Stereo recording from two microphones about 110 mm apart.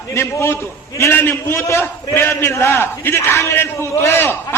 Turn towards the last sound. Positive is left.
turn(degrees=20)  # may be behind; listen again after turning